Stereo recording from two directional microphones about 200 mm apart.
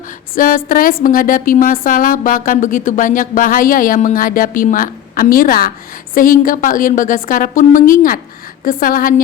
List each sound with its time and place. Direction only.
0.3 s speech: 45° left (ahead or behind)